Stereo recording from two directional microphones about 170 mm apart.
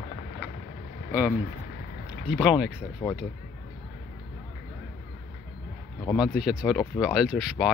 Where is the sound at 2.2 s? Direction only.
5° right (ahead or behind).